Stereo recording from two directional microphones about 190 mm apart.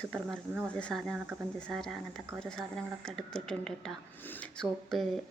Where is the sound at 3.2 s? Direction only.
5° left (ahead or behind).